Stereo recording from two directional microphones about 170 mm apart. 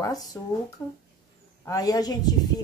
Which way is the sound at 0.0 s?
20° left (ahead or behind).